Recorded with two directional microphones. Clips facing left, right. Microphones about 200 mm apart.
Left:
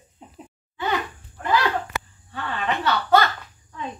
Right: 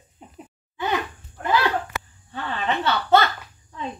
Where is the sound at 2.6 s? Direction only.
25° right (ahead or behind).